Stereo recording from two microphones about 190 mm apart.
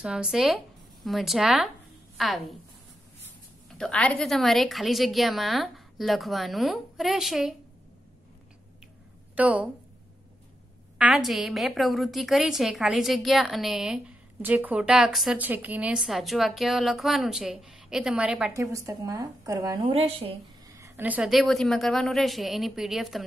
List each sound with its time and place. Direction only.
0.0 s a woman's voice: 5° right (ahead or behind)
3.7 s a woman's voice: 5° left (ahead or behind)
9.3 s a woman's voice: 5° right (ahead or behind)
11.0 s a woman's voice: centre (ahead or behind)
18.5 s a woman's voice: 15° right (ahead or behind)
19.9 s a woman's voice: 30° right (ahead or behind)
20.6 s a woman's voice: 15° right (ahead or behind)